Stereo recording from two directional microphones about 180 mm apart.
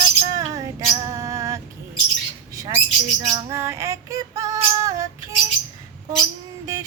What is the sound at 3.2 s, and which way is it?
Female singing, 20° right (ahead or behind).